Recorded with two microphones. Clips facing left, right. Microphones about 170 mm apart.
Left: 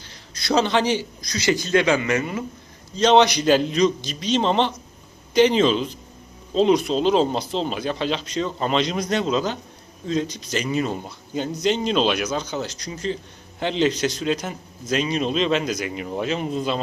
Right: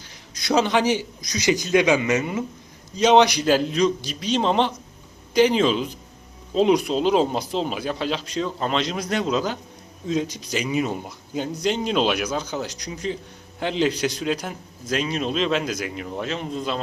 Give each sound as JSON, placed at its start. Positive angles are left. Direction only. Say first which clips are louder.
{"t": 0.4, "sound": "speech", "louder": "even", "side_deg": -10}